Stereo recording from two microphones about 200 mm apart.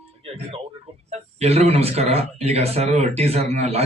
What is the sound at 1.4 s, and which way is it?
Speech, 30° right (ahead or behind).